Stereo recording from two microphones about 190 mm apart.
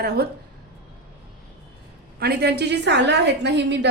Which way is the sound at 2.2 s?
60° right (ahead or behind).